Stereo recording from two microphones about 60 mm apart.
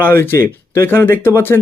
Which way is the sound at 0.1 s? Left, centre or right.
Left.